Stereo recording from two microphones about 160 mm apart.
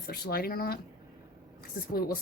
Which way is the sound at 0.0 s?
75° left (ahead or behind).